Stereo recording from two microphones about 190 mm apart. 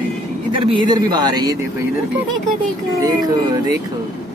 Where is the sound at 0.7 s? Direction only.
20° right (ahead or behind).